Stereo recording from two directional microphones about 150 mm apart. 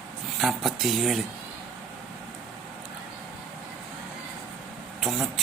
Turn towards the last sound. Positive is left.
turn(degrees=0)  # may be behind; listen again after turning